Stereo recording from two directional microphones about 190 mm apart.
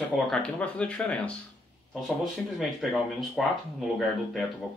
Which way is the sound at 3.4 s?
Centre (ahead or behind).